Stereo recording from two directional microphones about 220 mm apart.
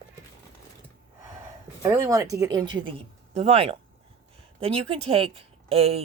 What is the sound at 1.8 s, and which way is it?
Speech, 10° right (ahead or behind).